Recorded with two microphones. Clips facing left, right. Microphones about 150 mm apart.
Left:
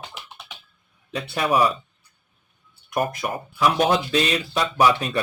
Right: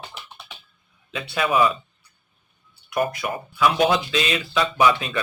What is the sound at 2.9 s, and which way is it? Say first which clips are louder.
Speech: right 1 dB; 45° left (ahead or behind).